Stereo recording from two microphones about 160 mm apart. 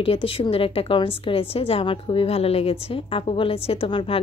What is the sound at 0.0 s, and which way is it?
A woman's voice, 35° left (ahead or behind).